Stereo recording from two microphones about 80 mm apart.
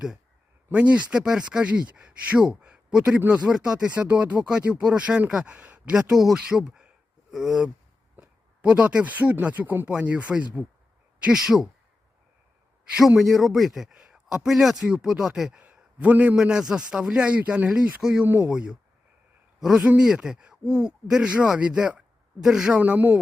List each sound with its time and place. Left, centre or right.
0.7 s speech: centre
13.0 s a man's voice: centre
22.8 s speech: centre